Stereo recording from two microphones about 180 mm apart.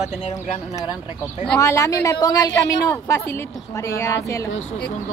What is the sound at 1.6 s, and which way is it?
A woman's voice, 15° left (ahead or behind).